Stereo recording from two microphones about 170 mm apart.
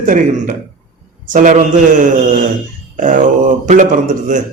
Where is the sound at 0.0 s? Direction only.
50° right (ahead or behind).